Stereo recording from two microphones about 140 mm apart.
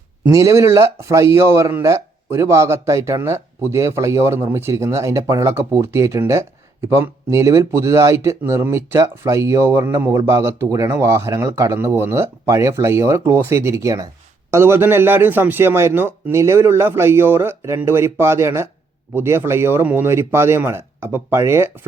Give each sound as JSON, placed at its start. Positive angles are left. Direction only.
{"t": 0.3, "sound": "a man's voice", "side_deg": -20}